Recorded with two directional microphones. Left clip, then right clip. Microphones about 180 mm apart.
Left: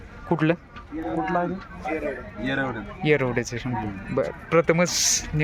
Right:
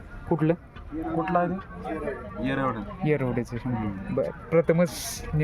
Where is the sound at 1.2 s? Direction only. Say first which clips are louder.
Right 1 dB; 20° right (ahead or behind).